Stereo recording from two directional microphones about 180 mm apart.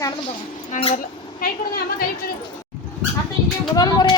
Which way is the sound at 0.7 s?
45° left (ahead or behind).